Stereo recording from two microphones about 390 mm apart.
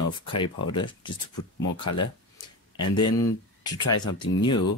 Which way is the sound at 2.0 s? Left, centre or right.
Centre.